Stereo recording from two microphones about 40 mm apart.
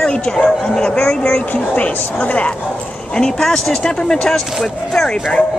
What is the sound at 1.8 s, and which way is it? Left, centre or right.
Speech, left.